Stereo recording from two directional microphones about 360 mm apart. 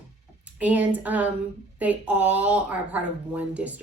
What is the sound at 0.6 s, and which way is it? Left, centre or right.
Speech, centre.